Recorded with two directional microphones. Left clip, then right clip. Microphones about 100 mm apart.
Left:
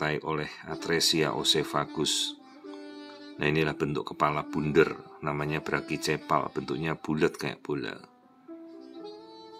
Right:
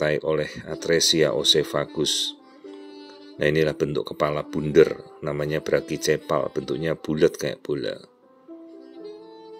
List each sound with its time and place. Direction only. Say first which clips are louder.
0.0 s speech: right 8 dB; 30° right (ahead or behind)
3.3 s speech: right 6 dB; 30° right (ahead or behind)